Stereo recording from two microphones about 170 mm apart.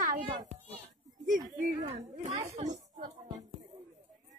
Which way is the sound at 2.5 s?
45° right (ahead or behind).